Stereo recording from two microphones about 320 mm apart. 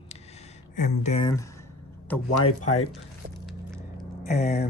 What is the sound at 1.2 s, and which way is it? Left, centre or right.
Speech, centre.